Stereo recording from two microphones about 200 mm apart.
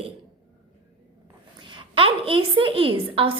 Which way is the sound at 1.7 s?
25° right (ahead or behind).